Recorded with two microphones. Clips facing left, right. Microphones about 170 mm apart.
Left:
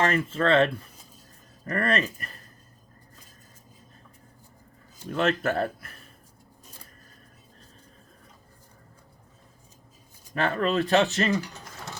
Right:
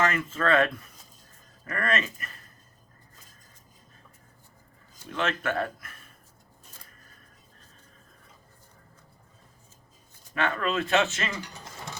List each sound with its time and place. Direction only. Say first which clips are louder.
0.0 s speech: left 2 dB; 30° left (ahead or behind)
5.1 s speech: left 4 dB; 40° left (ahead or behind)
10.3 s speech: left 3 dB; 35° left (ahead or behind)